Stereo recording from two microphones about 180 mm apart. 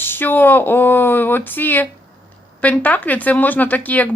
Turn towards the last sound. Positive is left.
turn(degrees=10)  # may be behind; listen again after turning